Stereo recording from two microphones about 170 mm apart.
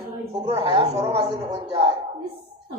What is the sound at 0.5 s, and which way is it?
A man's voice, 25° right (ahead or behind).